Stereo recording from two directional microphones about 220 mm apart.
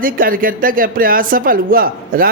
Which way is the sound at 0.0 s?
40° right (ahead or behind).